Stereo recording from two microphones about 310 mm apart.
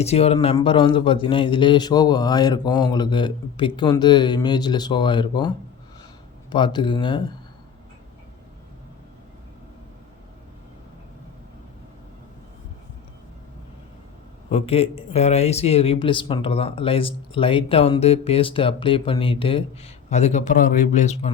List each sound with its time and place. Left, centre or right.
0.0 s speech: centre
14.5 s speech: centre